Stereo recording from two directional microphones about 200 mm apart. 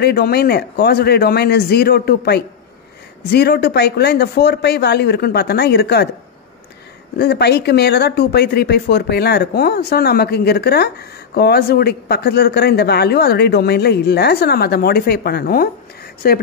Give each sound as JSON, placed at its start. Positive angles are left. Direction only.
{"t": 0.0, "sound": "speech", "side_deg": 50}
{"t": 7.2, "sound": "speech", "side_deg": 55}